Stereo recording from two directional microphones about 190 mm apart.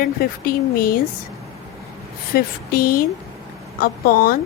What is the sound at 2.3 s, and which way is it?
A woman's voice, 50° left (ahead or behind).